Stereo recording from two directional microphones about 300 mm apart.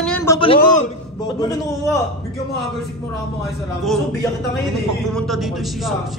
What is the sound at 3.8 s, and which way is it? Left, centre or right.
A man's voice, centre.